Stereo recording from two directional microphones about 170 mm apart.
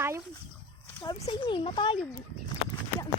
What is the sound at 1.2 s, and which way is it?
Speech, 30° left (ahead or behind).